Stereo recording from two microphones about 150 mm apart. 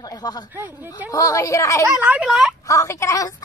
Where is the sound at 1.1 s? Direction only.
20° left (ahead or behind).